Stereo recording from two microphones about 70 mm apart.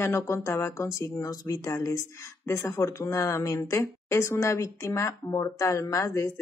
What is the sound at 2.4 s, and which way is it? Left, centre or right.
Speech, left.